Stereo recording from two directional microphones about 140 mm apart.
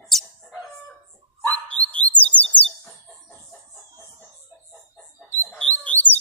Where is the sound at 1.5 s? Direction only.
10° left (ahead or behind).